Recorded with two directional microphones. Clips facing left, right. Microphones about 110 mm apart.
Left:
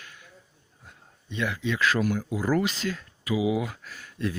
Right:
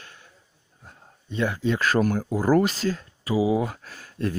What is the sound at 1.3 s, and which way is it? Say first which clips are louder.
Speech: right 4 dB; 40° right (ahead or behind).